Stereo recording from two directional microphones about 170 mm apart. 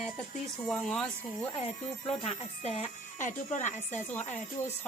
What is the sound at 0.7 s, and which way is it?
Speech, 5° left (ahead or behind).